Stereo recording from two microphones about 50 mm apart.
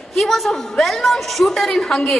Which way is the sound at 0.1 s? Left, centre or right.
Centre.